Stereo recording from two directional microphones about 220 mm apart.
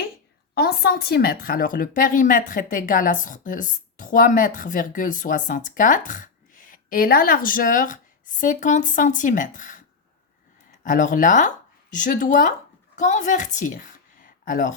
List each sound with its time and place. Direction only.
0.5 s speech: 45° left (ahead or behind)
10.8 s speech: 35° left (ahead or behind)